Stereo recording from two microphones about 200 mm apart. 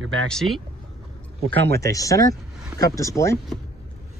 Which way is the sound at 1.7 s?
15° left (ahead or behind).